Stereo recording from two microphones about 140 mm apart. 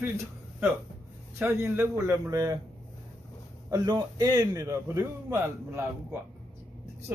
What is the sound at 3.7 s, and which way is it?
A man's voice, 30° right (ahead or behind).